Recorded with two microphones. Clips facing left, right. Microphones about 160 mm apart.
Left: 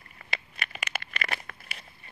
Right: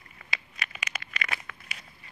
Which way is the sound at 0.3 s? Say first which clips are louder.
Left 1 dB; 60° left (ahead or behind).